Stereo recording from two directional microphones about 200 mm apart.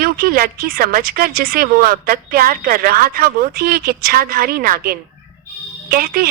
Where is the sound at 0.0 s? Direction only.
50° right (ahead or behind).